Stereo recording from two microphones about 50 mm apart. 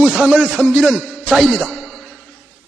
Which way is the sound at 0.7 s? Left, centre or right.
Centre.